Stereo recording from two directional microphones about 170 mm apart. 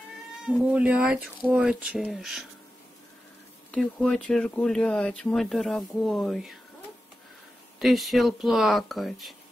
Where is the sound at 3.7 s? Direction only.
5° left (ahead or behind).